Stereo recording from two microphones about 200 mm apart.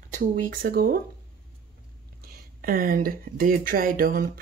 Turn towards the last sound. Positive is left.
turn(degrees=-45)  # may be behind; listen again after turning